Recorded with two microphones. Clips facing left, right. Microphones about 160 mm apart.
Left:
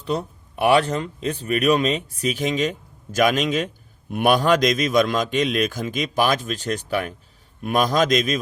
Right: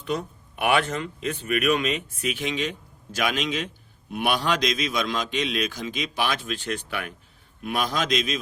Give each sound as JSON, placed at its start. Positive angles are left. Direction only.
{"t": 0.0, "sound": "a man's voice", "side_deg": 35}